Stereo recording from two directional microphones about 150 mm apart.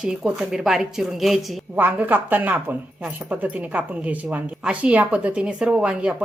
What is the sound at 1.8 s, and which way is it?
Speech, 10° right (ahead or behind).